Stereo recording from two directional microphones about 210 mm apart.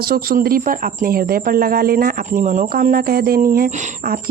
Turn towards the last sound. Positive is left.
turn(degrees=-40)  # may be behind; listen again after turning